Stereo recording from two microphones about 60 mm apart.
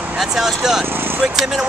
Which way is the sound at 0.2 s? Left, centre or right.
Centre.